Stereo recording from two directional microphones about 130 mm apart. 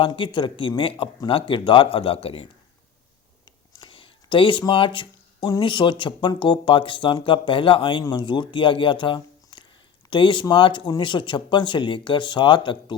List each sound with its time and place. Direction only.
0.0 s speech: 40° left (ahead or behind)
3.8 s speech: 40° left (ahead or behind)